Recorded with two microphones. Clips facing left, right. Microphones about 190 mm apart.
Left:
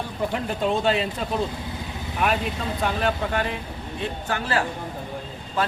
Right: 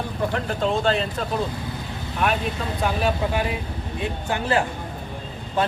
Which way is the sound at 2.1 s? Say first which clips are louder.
Right 1 dB; centre (ahead or behind).